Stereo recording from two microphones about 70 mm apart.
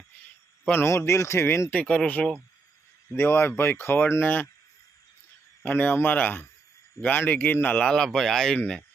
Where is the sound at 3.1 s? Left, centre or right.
Left.